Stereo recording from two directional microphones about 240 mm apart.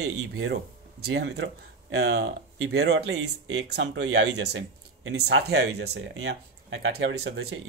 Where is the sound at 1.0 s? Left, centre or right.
Right.